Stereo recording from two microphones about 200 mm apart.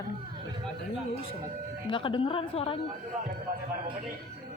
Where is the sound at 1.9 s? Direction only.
25° left (ahead or behind).